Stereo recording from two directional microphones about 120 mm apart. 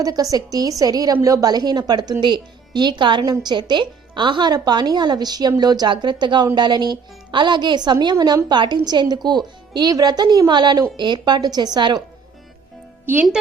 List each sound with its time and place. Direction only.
0.0 s a woman's voice: 30° right (ahead or behind)